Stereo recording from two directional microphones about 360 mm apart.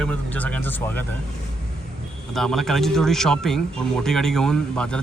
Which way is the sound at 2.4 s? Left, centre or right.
Centre.